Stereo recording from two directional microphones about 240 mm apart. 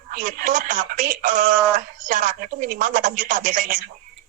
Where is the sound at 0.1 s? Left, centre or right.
Right.